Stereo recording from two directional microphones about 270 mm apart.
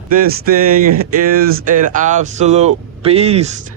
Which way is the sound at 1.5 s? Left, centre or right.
Right.